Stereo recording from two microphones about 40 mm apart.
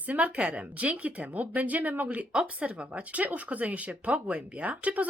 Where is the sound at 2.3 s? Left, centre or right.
Right.